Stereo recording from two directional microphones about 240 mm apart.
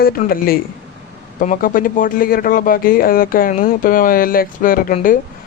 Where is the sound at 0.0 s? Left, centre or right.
Left.